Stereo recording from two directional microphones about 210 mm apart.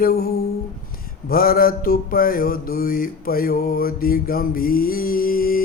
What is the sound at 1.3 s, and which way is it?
Mantra, 45° left (ahead or behind).